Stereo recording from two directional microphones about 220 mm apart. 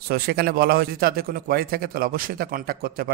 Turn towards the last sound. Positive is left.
turn(degrees=-40)  # may be behind; listen again after turning